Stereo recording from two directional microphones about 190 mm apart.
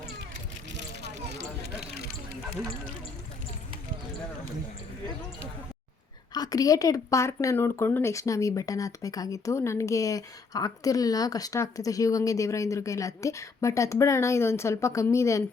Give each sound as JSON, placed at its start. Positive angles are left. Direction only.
{"t": 6.3, "sound": "a woman's voice", "side_deg": 20}